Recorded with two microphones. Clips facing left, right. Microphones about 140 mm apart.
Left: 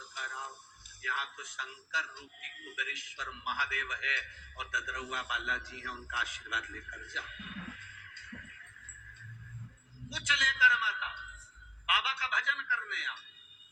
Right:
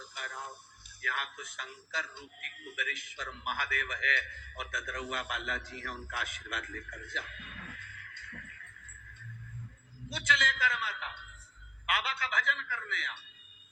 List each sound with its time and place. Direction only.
0.1 s music: 55° right (ahead or behind)
1.0 s a man's voice: 55° right (ahead or behind)
7.7 s music: 55° right (ahead or behind)
10.3 s a sound: 50° right (ahead or behind)
11.9 s music: 55° right (ahead or behind)